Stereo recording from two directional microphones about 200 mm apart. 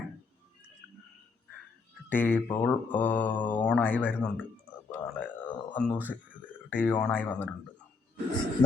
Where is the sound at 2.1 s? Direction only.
10° left (ahead or behind).